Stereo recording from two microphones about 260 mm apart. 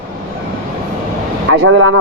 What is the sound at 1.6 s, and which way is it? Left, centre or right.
Speech, right.